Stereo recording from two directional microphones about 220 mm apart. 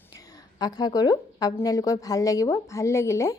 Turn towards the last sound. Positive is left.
turn(degrees=15)  # may be behind; listen again after turning